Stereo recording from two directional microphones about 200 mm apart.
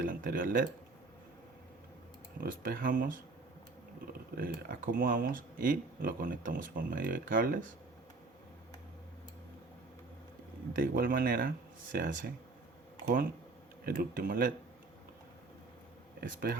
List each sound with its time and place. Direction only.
0.0 s speech: 45° right (ahead or behind)
2.4 s speech: 45° right (ahead or behind)
4.4 s speech: 50° right (ahead or behind)
10.8 s speech: 45° right (ahead or behind)
13.8 s speech: 45° right (ahead or behind)
16.2 s speech: 45° right (ahead or behind)